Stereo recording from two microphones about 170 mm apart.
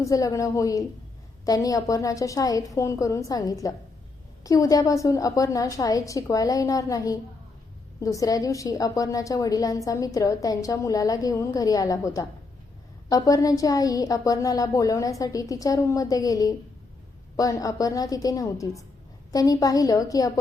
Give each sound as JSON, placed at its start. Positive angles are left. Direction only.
{"t": 0.0, "sound": "a woman's voice", "side_deg": 20}